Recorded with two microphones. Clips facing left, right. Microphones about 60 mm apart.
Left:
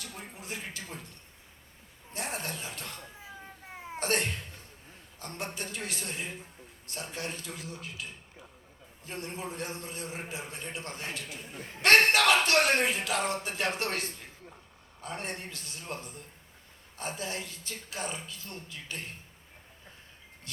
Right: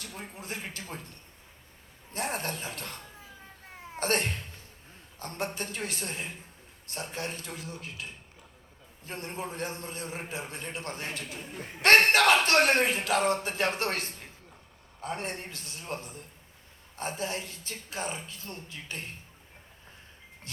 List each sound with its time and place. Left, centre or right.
0.2 s a man's voice: right
2.1 s a man's voice: right
4.0 s a man's voice: right
9.0 s a man's voice: right